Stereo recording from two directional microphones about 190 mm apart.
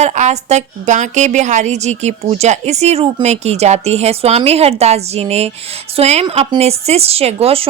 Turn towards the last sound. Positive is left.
turn(degrees=-30)  # may be behind; listen again after turning